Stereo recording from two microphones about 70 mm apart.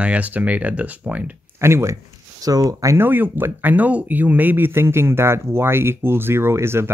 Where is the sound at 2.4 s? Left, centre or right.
Right.